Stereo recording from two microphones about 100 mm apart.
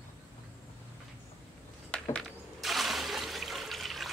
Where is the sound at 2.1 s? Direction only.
Centre (ahead or behind).